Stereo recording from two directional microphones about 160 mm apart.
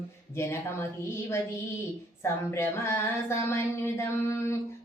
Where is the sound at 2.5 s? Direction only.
15° left (ahead or behind).